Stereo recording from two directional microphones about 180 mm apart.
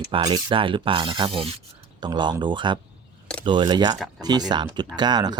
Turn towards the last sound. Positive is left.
turn(degrees=-25)  # may be behind; listen again after turning